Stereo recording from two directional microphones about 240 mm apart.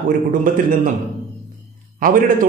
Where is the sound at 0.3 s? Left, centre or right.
Right.